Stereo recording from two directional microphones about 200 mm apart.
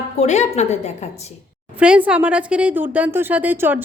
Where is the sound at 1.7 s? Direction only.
5° right (ahead or behind).